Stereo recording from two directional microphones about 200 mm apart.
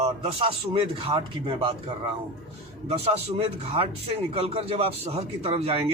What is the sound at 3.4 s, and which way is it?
Speech, 30° right (ahead or behind).